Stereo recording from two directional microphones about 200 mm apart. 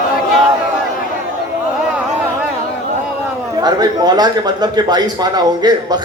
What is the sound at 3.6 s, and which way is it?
A man's voice, 20° right (ahead or behind).